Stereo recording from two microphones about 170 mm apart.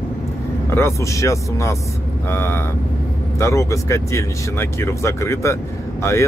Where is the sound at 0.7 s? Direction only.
15° left (ahead or behind).